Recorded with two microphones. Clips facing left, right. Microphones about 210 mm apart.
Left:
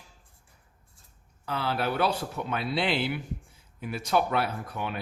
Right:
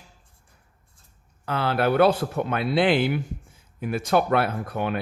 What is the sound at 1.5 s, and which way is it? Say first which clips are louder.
Speech: right 7 dB; 60° right (ahead or behind).